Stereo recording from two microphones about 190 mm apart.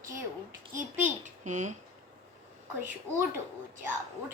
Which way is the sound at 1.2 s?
40° right (ahead or behind).